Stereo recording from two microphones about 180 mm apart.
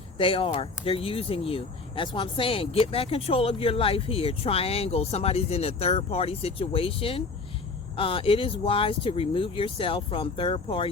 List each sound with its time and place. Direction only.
0.2 s speech: 30° left (ahead or behind)